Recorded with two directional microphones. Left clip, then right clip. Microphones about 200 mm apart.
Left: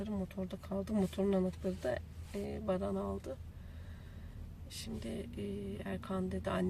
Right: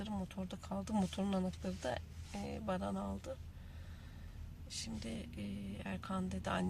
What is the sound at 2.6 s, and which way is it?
Speech, centre (ahead or behind).